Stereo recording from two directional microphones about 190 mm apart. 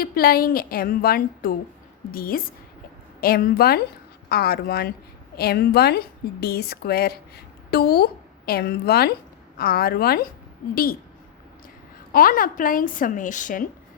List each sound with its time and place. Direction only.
0.0 s a woman's voice: 50° left (ahead or behind)
12.1 s a woman's voice: 50° left (ahead or behind)